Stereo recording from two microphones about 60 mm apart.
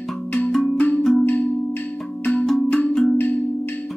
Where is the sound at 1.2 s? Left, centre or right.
Left.